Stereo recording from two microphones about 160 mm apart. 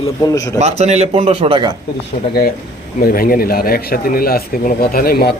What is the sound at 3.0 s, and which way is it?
Speech, 65° left (ahead or behind).